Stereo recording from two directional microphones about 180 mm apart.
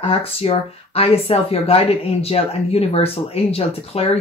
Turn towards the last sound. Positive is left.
turn(degrees=35)  # may be behind; listen again after turning